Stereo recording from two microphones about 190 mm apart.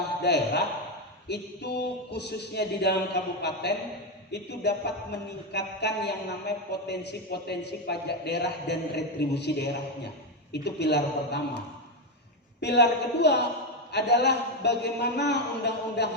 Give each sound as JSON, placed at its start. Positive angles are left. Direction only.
{"t": 0.2, "sound": "a man's voice", "side_deg": 60}
{"t": 12.5, "sound": "a man's voice", "side_deg": 60}